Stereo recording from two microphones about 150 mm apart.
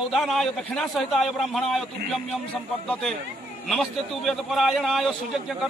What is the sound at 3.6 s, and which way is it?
A man's voice, centre (ahead or behind).